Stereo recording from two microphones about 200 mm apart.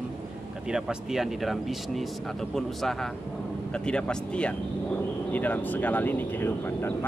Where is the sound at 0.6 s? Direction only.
5° right (ahead or behind).